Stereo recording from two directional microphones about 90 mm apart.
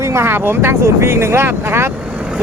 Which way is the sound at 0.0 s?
30° right (ahead or behind).